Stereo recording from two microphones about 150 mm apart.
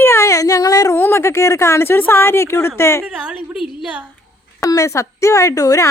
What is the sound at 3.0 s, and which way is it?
A woman's voice, 5° right (ahead or behind).